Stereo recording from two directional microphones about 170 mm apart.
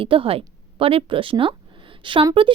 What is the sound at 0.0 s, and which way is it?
A woman's voice, 30° right (ahead or behind).